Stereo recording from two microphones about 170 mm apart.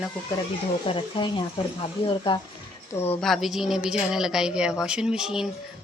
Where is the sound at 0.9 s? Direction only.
30° left (ahead or behind).